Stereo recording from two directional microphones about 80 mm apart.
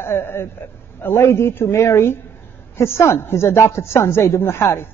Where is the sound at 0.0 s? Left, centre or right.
Left.